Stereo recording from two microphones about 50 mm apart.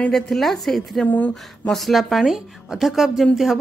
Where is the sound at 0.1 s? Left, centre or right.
Centre.